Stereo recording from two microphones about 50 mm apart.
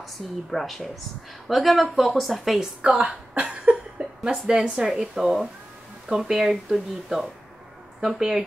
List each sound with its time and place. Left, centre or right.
0.0 s speech: centre
3.0 s speech: right
3.4 s cough: centre
5.0 s speech: centre